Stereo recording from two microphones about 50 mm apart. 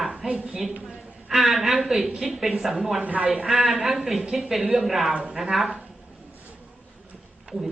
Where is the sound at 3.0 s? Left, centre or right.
Right.